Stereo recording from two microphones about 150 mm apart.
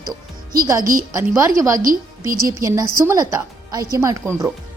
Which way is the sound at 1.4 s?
20° right (ahead or behind).